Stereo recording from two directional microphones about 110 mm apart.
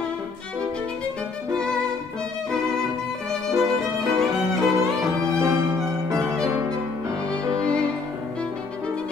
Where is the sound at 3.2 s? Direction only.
5° left (ahead or behind).